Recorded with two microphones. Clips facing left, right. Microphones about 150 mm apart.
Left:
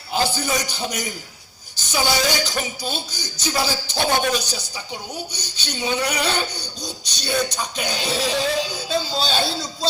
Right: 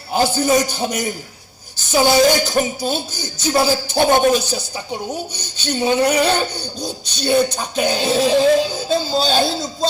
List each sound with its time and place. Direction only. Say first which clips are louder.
0.1 s speech: right 7 dB; 50° right (ahead or behind)